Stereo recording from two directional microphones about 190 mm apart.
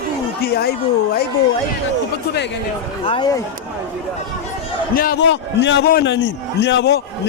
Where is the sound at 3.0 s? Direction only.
25° left (ahead or behind).